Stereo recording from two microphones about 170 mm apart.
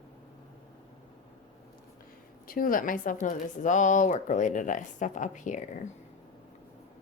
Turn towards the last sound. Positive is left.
turn(degrees=45)  # may be behind; listen again after turning